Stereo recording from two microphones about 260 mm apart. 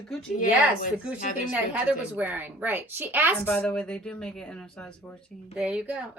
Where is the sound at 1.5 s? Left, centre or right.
Centre.